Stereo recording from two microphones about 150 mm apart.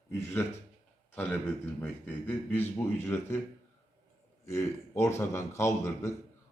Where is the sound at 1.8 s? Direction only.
10° left (ahead or behind).